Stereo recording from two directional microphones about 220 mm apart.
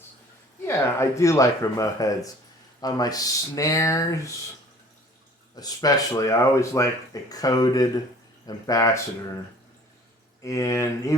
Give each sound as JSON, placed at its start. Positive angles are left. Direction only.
{"t": 0.6, "sound": "speech", "side_deg": 10}
{"t": 5.5, "sound": "speech", "side_deg": 15}
{"t": 10.4, "sound": "speech", "side_deg": 15}